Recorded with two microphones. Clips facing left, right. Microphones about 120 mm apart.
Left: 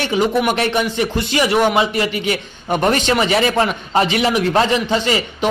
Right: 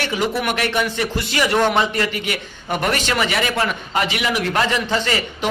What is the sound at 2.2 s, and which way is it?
A man's voice, 25° left (ahead or behind).